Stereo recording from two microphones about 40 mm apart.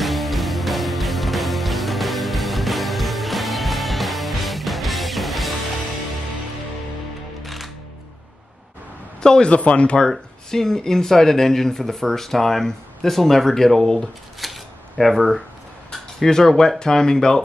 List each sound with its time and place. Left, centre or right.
0.0 s music: centre
7.4 s music: centre
9.2 s a man's voice: centre
9.5 s speech: left
10.5 s speech: centre
14.4 s shuffling cards: centre
16.2 s speech: centre